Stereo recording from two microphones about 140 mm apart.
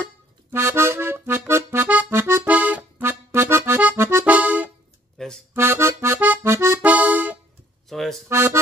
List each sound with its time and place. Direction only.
0.5 s accordion: 20° right (ahead or behind)
5.1 s music: 5° left (ahead or behind)
5.5 s accordion: 15° right (ahead or behind)
7.9 s accordion: centre (ahead or behind)
8.3 s accordion: 20° right (ahead or behind)